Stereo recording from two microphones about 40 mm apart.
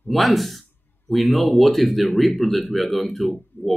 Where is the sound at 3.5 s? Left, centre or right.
Left.